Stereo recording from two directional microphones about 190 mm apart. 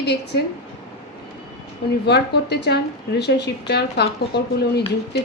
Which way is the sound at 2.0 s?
60° left (ahead or behind).